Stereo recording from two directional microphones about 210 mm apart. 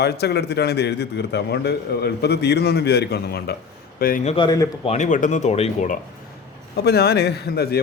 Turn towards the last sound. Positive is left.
turn(degrees=50)  # may be behind; listen again after turning